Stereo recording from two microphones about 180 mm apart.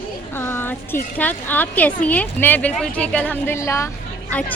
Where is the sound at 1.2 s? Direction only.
10° left (ahead or behind).